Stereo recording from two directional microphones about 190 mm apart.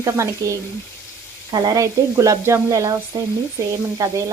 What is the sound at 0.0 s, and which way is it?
Sizzle, 15° right (ahead or behind).